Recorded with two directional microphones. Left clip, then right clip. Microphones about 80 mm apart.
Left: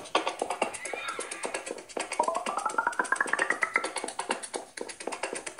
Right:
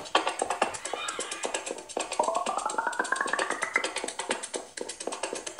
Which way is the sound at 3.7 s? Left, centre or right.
Left.